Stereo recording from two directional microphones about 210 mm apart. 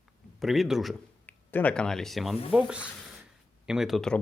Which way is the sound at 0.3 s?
Centre (ahead or behind).